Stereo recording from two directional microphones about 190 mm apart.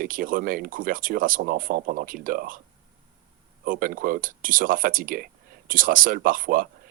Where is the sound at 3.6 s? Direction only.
45° right (ahead or behind).